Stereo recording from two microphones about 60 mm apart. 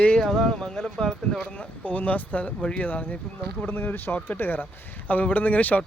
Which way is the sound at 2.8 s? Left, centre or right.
Left.